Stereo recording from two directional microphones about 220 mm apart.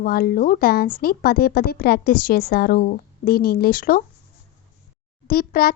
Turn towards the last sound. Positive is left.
turn(degrees=40)  # may be behind; listen again after turning